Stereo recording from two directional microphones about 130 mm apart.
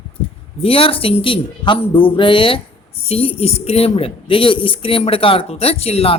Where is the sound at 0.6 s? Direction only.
45° left (ahead or behind).